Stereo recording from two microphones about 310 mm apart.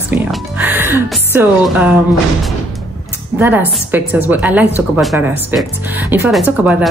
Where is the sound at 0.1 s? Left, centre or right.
Centre.